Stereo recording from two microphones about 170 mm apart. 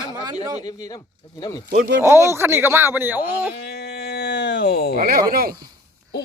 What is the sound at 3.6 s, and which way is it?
Sheep, 65° left (ahead or behind).